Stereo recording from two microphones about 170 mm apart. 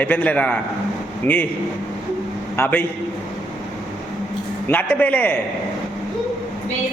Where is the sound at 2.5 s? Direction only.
15° left (ahead or behind).